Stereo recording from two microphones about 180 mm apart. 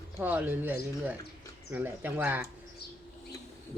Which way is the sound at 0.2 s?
10° right (ahead or behind).